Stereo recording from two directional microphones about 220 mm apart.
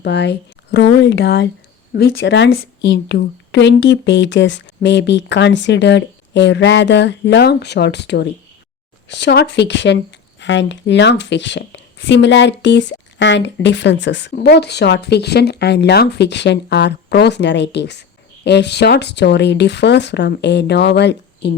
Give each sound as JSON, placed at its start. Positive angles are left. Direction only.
{"t": 0.0, "sound": "speech", "side_deg": 50}